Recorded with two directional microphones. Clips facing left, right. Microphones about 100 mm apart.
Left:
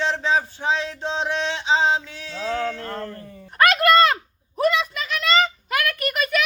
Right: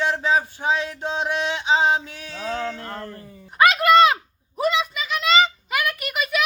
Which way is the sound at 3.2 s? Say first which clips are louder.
Right 1 dB; 5° right (ahead or behind).